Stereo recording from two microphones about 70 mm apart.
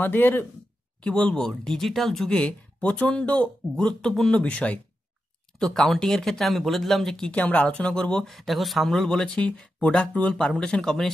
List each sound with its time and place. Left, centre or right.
0.0 s speech: left
1.0 s speech: centre
5.6 s speech: centre
7.2 s speech: left
8.3 s speech: centre